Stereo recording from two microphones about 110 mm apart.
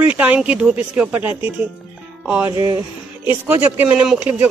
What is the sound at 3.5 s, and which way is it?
Speech, 15° right (ahead or behind).